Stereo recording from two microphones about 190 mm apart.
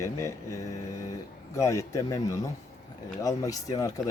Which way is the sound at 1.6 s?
15° left (ahead or behind).